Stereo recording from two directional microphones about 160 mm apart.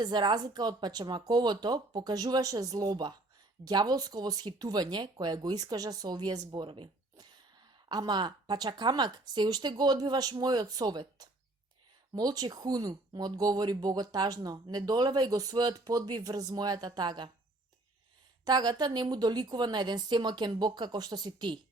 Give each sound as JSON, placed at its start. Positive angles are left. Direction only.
{"t": 0.0, "sound": "speech", "side_deg": -25}
{"t": 18.4, "sound": "speech", "side_deg": -25}